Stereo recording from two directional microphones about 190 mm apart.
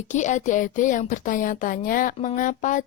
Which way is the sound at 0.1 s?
40° left (ahead or behind).